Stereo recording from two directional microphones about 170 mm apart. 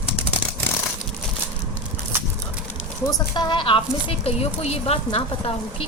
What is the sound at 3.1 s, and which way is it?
A woman's voice, 25° left (ahead or behind).